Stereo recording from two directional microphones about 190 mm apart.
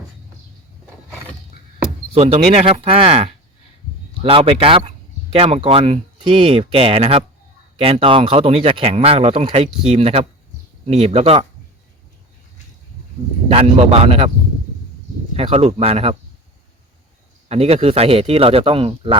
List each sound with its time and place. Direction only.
2.1 s speech: 35° right (ahead or behind)
13.5 s speech: 30° right (ahead or behind)
15.4 s speech: 30° right (ahead or behind)
17.5 s speech: 30° right (ahead or behind)